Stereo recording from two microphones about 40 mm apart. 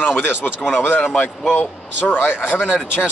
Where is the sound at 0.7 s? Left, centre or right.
Left.